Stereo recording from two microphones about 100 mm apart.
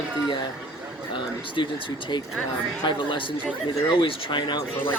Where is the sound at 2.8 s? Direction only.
55° left (ahead or behind).